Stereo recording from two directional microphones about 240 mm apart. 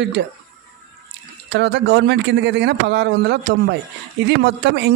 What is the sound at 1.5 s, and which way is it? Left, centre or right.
Speech, right.